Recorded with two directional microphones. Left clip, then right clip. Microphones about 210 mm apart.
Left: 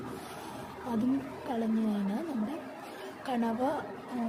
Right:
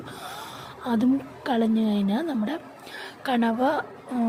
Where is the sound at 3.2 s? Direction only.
45° right (ahead or behind).